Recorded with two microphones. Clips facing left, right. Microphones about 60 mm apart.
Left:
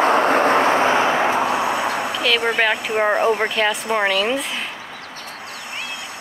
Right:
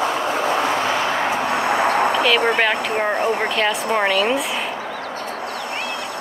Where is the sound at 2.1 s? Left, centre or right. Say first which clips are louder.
Right 3 dB; centre.